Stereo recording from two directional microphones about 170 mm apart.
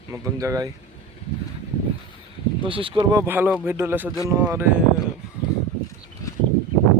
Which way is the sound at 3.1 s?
10° right (ahead or behind).